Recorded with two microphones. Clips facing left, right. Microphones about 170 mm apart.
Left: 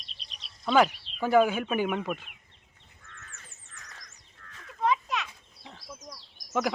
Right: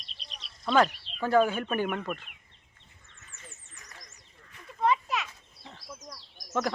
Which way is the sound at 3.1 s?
65° left (ahead or behind).